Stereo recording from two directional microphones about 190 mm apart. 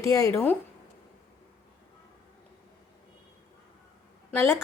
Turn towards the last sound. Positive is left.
turn(degrees=10)  # may be behind; listen again after turning